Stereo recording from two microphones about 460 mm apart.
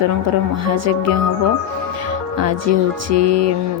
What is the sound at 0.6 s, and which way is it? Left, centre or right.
Speech, right.